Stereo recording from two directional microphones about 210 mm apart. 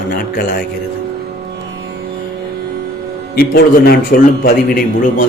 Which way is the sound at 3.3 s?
50° left (ahead or behind).